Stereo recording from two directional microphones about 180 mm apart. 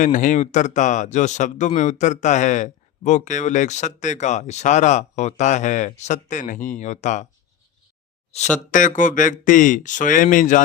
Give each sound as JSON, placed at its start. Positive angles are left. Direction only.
{"t": 0.0, "sound": "speech", "side_deg": 45}
{"t": 8.7, "sound": "speech", "side_deg": 45}